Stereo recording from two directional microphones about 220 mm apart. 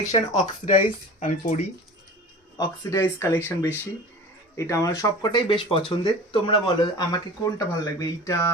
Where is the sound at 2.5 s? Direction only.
15° left (ahead or behind).